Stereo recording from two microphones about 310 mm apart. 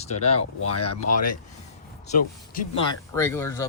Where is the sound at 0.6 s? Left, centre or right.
Left.